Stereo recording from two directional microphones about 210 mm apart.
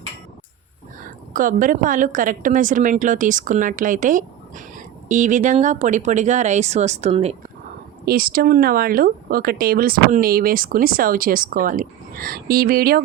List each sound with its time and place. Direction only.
1.3 s speech: 40° right (ahead or behind)
8.0 s speech: 45° right (ahead or behind)